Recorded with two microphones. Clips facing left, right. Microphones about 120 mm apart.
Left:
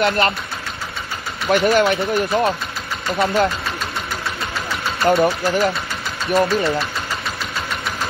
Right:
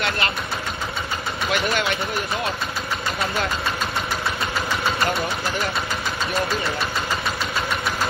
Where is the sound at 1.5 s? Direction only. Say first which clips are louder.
Left 9 dB; 45° left (ahead or behind).